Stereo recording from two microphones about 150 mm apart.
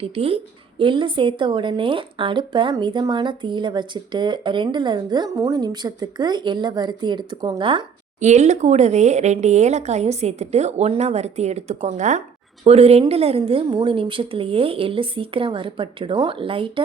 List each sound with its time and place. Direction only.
0.0 s a woman's voice: 40° right (ahead or behind)
8.2 s a woman's voice: 50° right (ahead or behind); by 16.8 s 35° right (ahead or behind)